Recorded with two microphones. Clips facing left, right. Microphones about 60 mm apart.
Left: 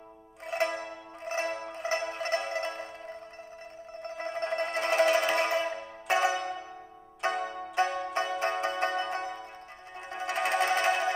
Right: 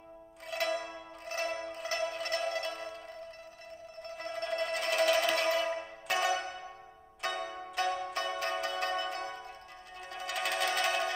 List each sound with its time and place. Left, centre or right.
0.5 s zither: left
1.3 s music: left
7.2 s zither: left
8.4 s music: left